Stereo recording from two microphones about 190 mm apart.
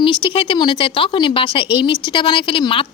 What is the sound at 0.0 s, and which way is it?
A woman's voice, 25° left (ahead or behind).